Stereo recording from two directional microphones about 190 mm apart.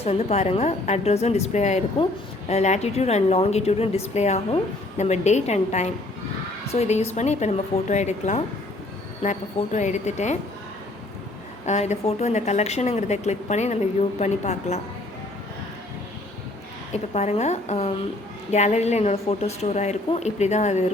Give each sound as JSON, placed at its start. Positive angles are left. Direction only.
{"t": 0.0, "sound": "a woman's voice", "side_deg": 35}
{"t": 11.6, "sound": "a woman's voice", "side_deg": 35}
{"t": 16.9, "sound": "a woman's voice", "side_deg": 35}